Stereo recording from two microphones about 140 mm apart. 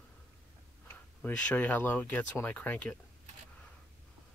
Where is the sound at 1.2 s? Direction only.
10° left (ahead or behind).